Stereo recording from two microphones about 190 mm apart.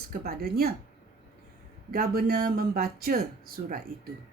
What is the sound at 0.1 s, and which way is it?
Speech, 55° right (ahead or behind).